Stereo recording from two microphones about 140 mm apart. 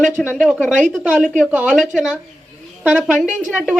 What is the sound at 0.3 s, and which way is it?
Speech, 10° left (ahead or behind).